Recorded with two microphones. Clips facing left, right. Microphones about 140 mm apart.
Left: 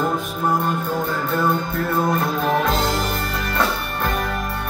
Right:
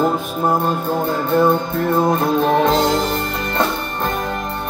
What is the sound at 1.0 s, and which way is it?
Music, 25° right (ahead or behind).